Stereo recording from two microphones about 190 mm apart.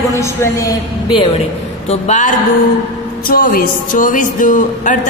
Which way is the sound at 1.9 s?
40° left (ahead or behind).